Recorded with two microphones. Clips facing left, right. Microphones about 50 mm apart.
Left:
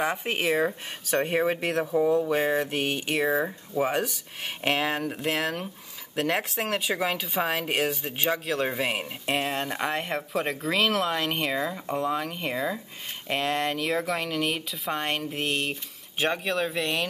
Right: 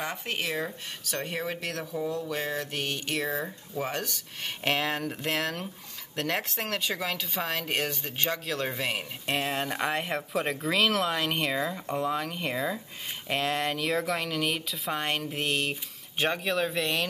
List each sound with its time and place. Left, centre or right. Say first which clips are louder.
0.0 s speech: left 6 dB; left; by 17.0 s centre